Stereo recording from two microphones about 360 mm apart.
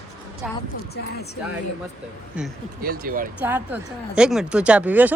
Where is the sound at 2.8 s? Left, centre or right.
Right.